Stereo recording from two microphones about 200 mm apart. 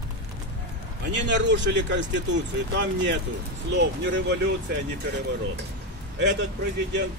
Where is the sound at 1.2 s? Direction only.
60° right (ahead or behind).